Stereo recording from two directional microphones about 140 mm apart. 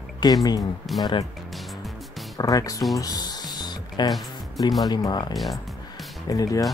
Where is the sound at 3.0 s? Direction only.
30° left (ahead or behind).